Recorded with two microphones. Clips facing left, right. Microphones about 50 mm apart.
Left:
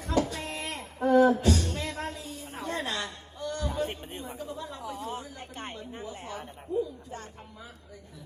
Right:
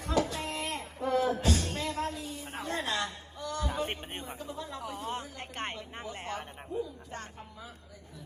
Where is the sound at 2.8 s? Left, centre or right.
Right.